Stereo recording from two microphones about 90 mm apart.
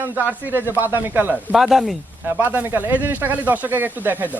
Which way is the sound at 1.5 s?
5° right (ahead or behind).